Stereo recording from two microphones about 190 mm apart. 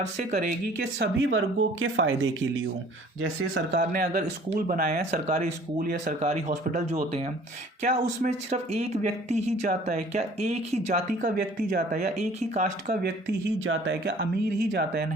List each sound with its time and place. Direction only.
0.0 s speech: 35° right (ahead or behind)
0.8 s speech: 65° right (ahead or behind)
1.8 s speech: 85° right
3.7 s speech: 50° right (ahead or behind)
5.2 s speech: 40° right (ahead or behind)
6.1 s speech: 35° right (ahead or behind)
12.9 s speech: 55° right (ahead or behind)
13.7 s speech: 70° right (ahead or behind)
14.7 s speech: 60° right (ahead or behind)